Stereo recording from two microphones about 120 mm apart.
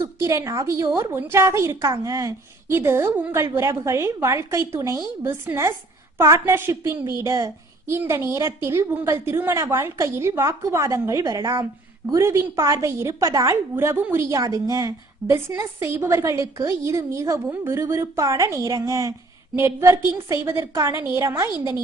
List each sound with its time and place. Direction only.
0.0 s a woman's voice: 25° right (ahead or behind)